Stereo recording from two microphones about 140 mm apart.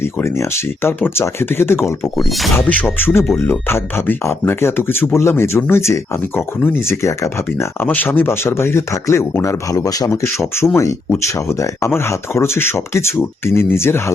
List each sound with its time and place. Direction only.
0.0 s speech: 20° left (ahead or behind)